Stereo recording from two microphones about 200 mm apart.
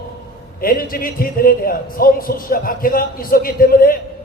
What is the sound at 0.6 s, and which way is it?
A man's voice, 45° left (ahead or behind).